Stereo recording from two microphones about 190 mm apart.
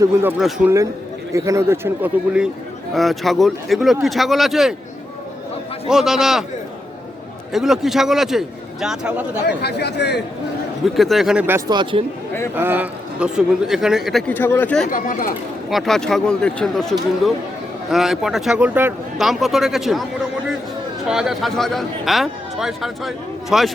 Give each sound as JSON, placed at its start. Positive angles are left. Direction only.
{"t": 0.0, "sound": "a man's voice", "side_deg": -10}
{"t": 1.3, "sound": "a man's voice", "side_deg": -15}
{"t": 5.9, "sound": "speech", "side_deg": 0}
{"t": 7.5, "sound": "speech", "side_deg": 0}
{"t": 9.6, "sound": "speech", "side_deg": 60}
{"t": 10.8, "sound": "speech", "side_deg": 0}
{"t": 11.7, "sound": "speech", "side_deg": -25}
{"t": 12.5, "sound": "speech", "side_deg": -10}
{"t": 14.8, "sound": "speech", "side_deg": 45}
{"t": 15.7, "sound": "speech", "side_deg": 0}
{"t": 21.1, "sound": "speech", "side_deg": 0}